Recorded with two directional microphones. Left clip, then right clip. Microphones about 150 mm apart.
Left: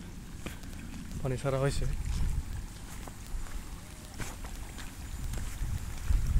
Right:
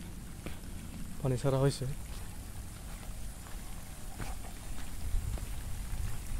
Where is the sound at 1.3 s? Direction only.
35° right (ahead or behind).